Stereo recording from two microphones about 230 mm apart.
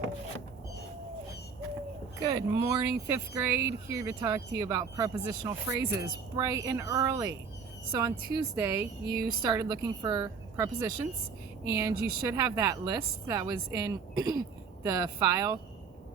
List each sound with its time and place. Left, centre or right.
2.2 s speech: centre